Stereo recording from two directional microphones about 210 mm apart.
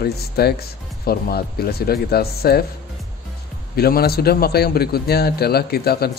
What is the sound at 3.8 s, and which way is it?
Speech, 45° left (ahead or behind).